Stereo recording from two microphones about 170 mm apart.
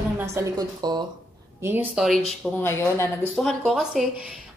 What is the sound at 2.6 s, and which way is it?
Speech, 15° left (ahead or behind).